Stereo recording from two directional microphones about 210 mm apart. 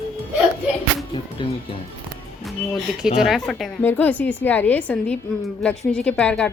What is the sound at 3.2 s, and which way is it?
A woman's voice, centre (ahead or behind).